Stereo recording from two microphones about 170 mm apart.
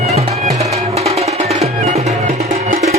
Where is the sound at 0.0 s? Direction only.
40° right (ahead or behind).